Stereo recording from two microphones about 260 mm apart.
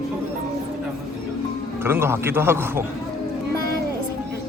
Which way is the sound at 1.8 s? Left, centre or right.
Centre.